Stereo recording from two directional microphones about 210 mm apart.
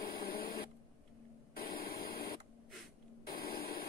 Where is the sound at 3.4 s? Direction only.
45° left (ahead or behind).